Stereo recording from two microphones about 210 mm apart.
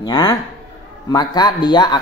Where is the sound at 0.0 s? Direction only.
20° left (ahead or behind).